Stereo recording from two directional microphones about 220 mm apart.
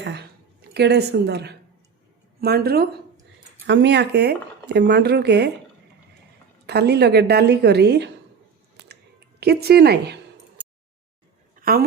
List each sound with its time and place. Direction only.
0.0 s a woman's voice: 50° right (ahead or behind)
6.7 s speech: 50° right (ahead or behind)
9.4 s speech: 45° right (ahead or behind)
11.6 s a woman's voice: 45° right (ahead or behind)